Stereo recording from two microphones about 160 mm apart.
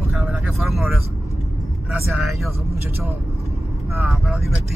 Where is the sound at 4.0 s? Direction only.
5° right (ahead or behind).